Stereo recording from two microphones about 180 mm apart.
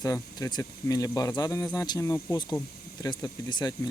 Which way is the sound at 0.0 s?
20° left (ahead or behind).